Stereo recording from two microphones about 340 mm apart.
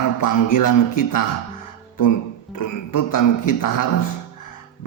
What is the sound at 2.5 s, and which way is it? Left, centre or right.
A man's voice, left.